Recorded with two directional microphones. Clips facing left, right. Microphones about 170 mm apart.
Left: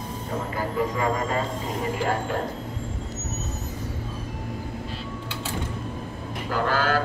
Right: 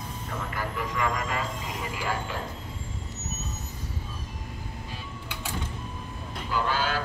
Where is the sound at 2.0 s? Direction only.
55° left (ahead or behind).